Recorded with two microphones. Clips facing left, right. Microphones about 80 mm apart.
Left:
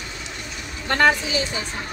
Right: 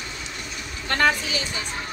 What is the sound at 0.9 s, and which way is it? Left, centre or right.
Speech, centre.